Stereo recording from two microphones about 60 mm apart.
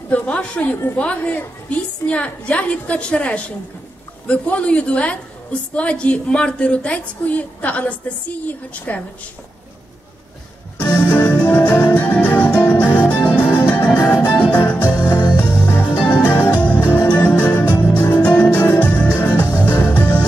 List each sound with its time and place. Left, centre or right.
0.1 s a woman's voice: left
10.8 s music: left